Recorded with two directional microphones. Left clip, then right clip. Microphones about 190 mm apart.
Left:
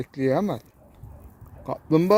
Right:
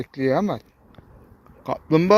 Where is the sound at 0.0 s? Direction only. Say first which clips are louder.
Right 2 dB; 10° left (ahead or behind).